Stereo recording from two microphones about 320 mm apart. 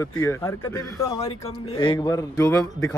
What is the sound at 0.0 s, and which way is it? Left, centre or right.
Speech, centre.